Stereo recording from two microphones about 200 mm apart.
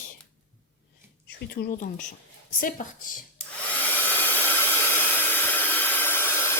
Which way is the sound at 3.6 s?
10° left (ahead or behind).